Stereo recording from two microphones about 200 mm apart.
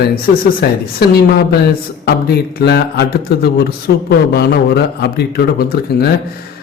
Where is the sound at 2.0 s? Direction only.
50° left (ahead or behind).